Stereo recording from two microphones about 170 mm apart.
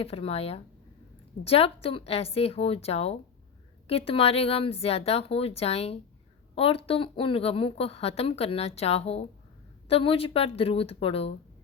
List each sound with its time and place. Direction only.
0.0 s a woman's voice: 35° left (ahead or behind)